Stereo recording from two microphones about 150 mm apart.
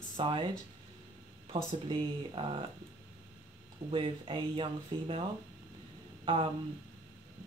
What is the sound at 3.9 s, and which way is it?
Speech, 35° right (ahead or behind).